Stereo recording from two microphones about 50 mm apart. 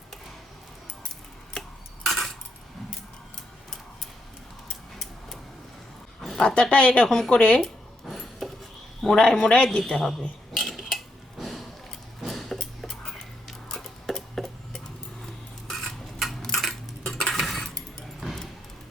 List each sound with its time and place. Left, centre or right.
2.0 s cutlery: centre
6.3 s speech: centre
8.1 s a sound: centre
9.0 s a man's voice: centre
10.9 s dishes: centre
12.2 s a sound: centre
15.7 s dishes: centre
16.4 s a sound: centre
17.1 s cutlery: centre
17.3 s cutlery: centre
18.2 s dog: centre